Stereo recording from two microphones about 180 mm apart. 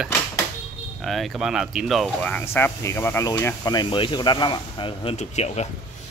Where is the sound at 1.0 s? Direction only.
Centre (ahead or behind); by 5.7 s 35° left (ahead or behind).